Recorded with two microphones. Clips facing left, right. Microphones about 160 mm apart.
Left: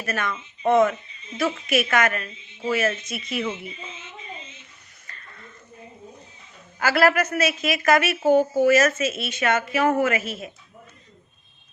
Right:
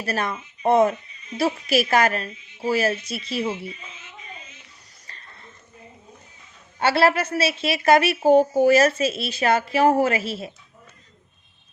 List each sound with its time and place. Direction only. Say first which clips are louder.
0.0 s a woman's voice: right 2 dB; 35° right (ahead or behind)
3.7 s speech: left 1 dB; 25° left (ahead or behind)
5.0 s a sound: left 2 dB; 35° right (ahead or behind)
6.7 s a woman's voice: right 1 dB; 30° right (ahead or behind)